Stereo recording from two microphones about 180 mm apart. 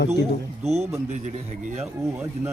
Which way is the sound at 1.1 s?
40° right (ahead or behind).